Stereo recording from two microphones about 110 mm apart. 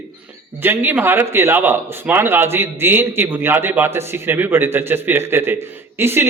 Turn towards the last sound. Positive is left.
turn(degrees=-20)  # may be behind; listen again after turning